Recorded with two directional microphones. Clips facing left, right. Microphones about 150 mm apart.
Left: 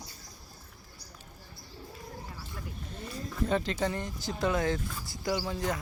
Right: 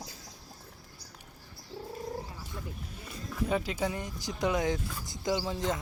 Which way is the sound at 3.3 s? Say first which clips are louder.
Left 1 dB; 10° right (ahead or behind).